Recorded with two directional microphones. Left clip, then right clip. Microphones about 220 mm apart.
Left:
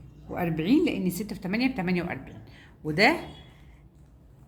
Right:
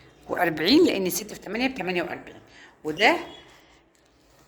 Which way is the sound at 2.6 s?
10° right (ahead or behind).